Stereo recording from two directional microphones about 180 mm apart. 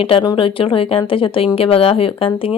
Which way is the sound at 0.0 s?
30° left (ahead or behind).